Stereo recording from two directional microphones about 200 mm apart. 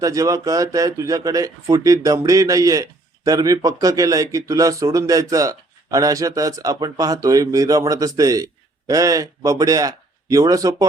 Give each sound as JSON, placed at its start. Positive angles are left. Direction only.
{"t": 0.0, "sound": "speech", "side_deg": -15}